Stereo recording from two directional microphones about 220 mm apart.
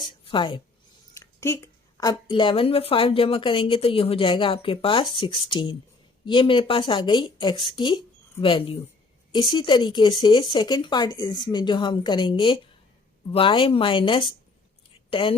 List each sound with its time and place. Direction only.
0.3 s a woman's voice: 25° left (ahead or behind)
1.1 s a woman's voice: 15° left (ahead or behind)